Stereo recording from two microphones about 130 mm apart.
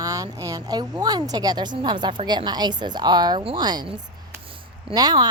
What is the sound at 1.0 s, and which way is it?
A woman's voice, 30° right (ahead or behind).